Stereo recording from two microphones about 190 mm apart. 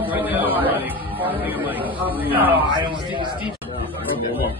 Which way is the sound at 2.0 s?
10° right (ahead or behind).